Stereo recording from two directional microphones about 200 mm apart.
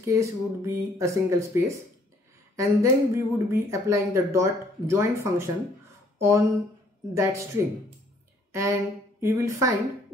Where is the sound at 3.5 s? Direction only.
15° right (ahead or behind).